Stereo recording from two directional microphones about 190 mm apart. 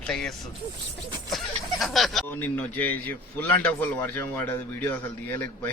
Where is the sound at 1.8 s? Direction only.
Centre (ahead or behind).